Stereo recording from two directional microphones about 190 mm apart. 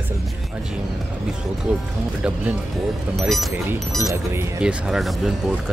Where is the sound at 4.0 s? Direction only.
15° right (ahead or behind).